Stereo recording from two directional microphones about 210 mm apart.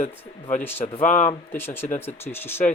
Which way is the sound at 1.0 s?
35° left (ahead or behind).